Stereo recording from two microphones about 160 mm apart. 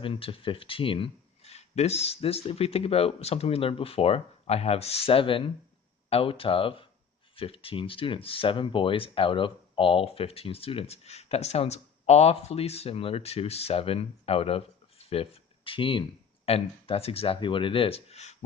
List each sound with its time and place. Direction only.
0.0 s speech: 35° left (ahead or behind)